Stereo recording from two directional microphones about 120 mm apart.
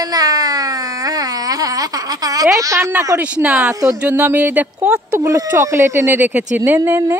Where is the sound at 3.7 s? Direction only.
30° right (ahead or behind).